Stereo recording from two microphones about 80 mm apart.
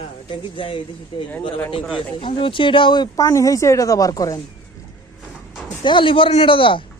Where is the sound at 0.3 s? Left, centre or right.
Left.